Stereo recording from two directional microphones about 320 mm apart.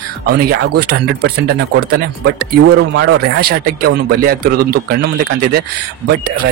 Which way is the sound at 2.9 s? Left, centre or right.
Right.